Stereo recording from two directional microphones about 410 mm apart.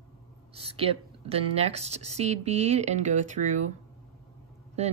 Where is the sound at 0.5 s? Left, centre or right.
Centre.